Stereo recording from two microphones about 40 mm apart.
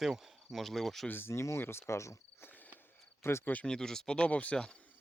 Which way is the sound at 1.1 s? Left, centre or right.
Left.